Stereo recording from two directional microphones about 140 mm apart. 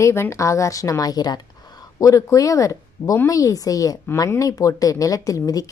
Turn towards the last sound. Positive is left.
turn(degrees=25)  # may be behind; listen again after turning